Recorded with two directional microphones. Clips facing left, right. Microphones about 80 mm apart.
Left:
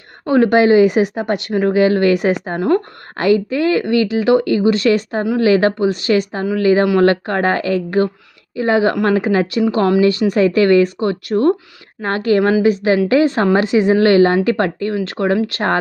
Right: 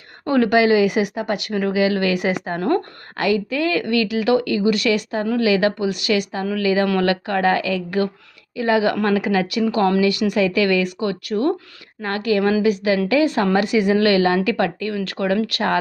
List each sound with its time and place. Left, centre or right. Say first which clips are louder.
0.3 s speech: left 4 dB; left
2.4 s speech: left 4 dB; left
3.2 s speech: left 5 dB; left